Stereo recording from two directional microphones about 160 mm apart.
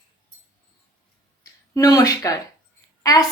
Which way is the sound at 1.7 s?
20° left (ahead or behind).